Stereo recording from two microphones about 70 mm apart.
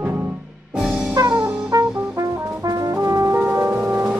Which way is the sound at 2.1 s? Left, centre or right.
Right.